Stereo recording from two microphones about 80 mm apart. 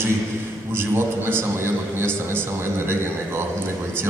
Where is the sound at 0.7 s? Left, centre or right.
Right.